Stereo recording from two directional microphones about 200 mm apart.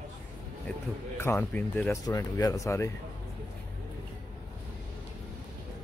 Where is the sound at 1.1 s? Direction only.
10° left (ahead or behind).